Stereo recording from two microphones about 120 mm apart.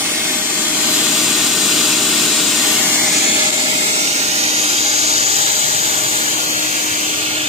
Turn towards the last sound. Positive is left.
turn(degrees=-55)  # may be behind; listen again after turning